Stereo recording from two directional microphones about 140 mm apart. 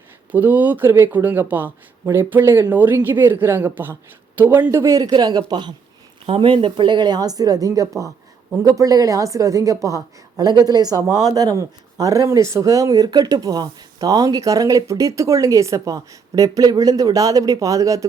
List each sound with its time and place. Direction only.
0.3 s speech: 10° right (ahead or behind)